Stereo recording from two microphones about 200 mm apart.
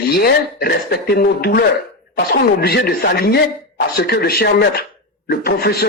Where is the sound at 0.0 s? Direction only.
50° left (ahead or behind).